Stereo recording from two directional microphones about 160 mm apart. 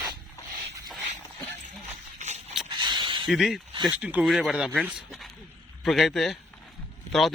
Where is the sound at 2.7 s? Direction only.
30° right (ahead or behind).